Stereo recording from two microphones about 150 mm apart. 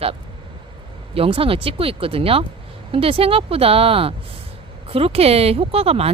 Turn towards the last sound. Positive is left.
turn(degrees=-40)  # may be behind; listen again after turning